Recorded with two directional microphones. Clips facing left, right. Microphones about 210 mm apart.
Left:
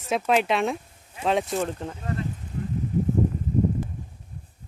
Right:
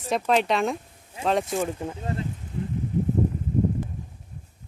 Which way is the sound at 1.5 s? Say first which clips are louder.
Even; 10° right (ahead or behind).